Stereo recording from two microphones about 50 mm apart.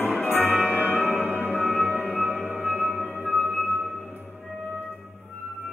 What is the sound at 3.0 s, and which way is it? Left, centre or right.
Music, right.